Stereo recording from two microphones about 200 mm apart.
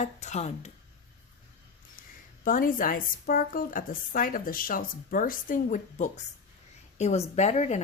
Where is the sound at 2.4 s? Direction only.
45° left (ahead or behind).